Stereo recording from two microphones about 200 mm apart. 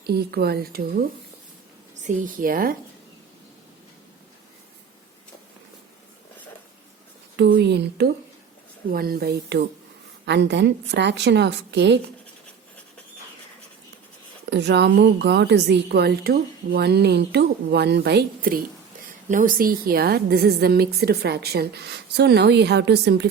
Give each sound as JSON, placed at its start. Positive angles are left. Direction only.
{"t": 0.0, "sound": "a woman's voice", "side_deg": -50}
{"t": 2.0, "sound": "a woman's voice", "side_deg": -40}
{"t": 7.3, "sound": "a woman's voice", "side_deg": -55}
{"t": 14.5, "sound": "a woman's voice", "side_deg": -60}